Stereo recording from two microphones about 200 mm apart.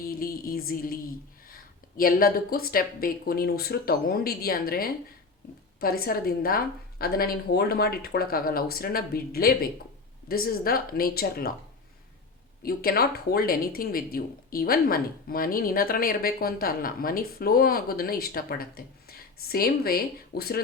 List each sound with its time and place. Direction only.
0.1 s speech: 45° left (ahead or behind)
2.0 s speech: 45° left (ahead or behind)
12.6 s speech: 50° left (ahead or behind)